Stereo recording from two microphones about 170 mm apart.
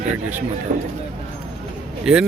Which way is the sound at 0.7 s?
40° right (ahead or behind).